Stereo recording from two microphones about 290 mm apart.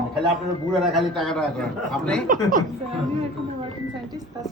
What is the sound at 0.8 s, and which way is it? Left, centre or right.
A man's voice, centre.